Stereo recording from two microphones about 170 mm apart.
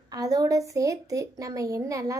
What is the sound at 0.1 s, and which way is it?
A woman's voice, 20° right (ahead or behind).